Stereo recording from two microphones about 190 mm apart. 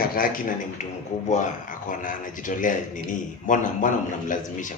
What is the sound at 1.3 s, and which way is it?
Speech, 40° left (ahead or behind).